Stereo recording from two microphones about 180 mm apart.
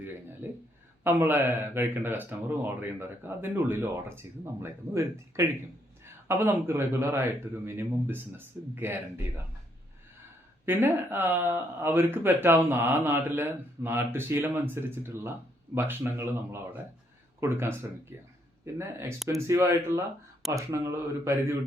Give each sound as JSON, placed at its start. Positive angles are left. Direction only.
{"t": 0.0, "sound": "a sound", "side_deg": -10}
{"t": 1.0, "sound": "speech", "side_deg": -10}
{"t": 10.7, "sound": "speech", "side_deg": -10}